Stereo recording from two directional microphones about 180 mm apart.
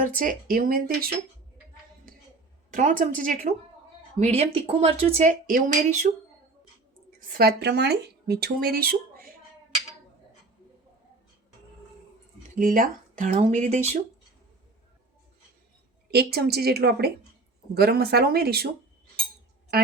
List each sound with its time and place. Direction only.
0.2 s speech: 50° right (ahead or behind)
2.6 s speech: 50° right (ahead or behind)
4.2 s speech: 35° right (ahead or behind)
5.5 s speech: 45° right (ahead or behind)
7.3 s speech: 60° right (ahead or behind)
12.5 s speech: 45° right (ahead or behind)
16.1 s speech: 60° right (ahead or behind)